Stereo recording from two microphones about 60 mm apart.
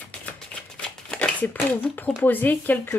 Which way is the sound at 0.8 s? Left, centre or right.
Centre.